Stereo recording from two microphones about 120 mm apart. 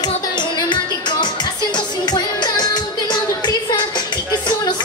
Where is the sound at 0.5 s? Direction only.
40° left (ahead or behind).